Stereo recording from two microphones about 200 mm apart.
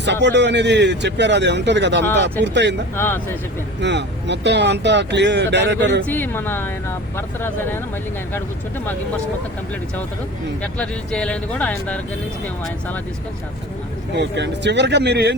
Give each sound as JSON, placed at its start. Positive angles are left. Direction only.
{"t": 0.0, "sound": "speech", "side_deg": -60}
{"t": 2.9, "sound": "speech", "side_deg": 10}
{"t": 3.8, "sound": "speech", "side_deg": -60}
{"t": 6.1, "sound": "speech", "side_deg": 10}
{"t": 10.6, "sound": "speech", "side_deg": 5}
{"t": 14.1, "sound": "speech", "side_deg": -60}